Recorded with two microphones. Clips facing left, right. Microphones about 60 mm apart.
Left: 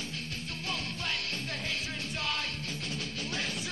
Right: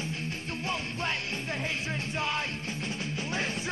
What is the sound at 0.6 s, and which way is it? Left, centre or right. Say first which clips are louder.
Music: right 4 dB; right.